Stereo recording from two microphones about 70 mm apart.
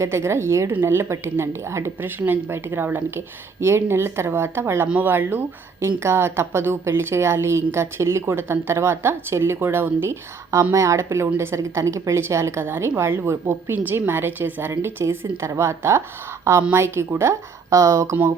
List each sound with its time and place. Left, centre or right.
0.0 s a woman's voice: right
10.5 s a woman's voice: right
13.7 s a woman's voice: right